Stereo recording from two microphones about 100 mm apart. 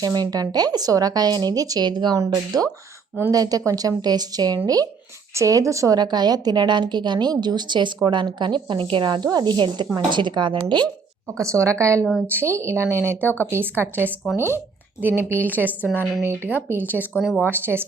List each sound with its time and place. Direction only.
0.0 s a woman's voice: 40° right (ahead or behind)
11.3 s speech: 30° right (ahead or behind)
13.2 s speech: 20° left (ahead or behind)
13.5 s speech: 20° right (ahead or behind)
14.3 s speech: 25° left (ahead or behind)
15.0 s speech: 20° right (ahead or behind)
17.0 s a woman's voice: 5° right (ahead or behind)
17.4 s speech: 20° right (ahead or behind)